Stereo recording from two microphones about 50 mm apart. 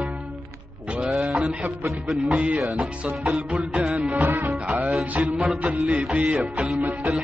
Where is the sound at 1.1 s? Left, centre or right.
Centre.